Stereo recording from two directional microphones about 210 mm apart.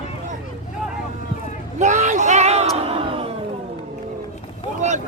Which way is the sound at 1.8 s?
35° right (ahead or behind).